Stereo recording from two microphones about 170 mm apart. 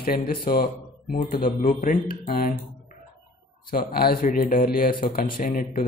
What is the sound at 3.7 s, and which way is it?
Speech, 60° left (ahead or behind).